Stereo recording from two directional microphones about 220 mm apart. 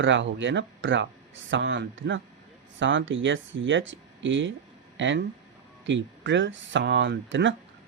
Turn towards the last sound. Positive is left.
turn(degrees=-55)  # may be behind; listen again after turning